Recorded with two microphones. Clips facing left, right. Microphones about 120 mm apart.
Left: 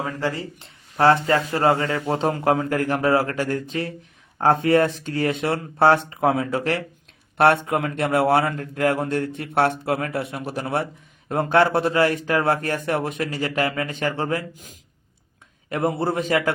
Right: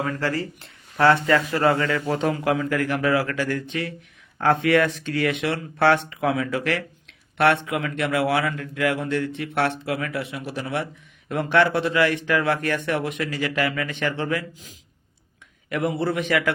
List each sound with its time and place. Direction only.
0.0 s speech: 15° left (ahead or behind)
0.9 s a man's voice: 30° left (ahead or behind)
15.7 s a man's voice: 45° left (ahead or behind)